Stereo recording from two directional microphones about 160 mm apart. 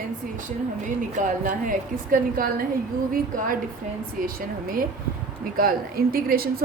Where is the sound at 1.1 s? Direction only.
55° right (ahead or behind).